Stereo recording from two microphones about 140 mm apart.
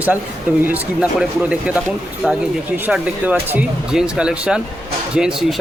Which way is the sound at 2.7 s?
10° right (ahead or behind).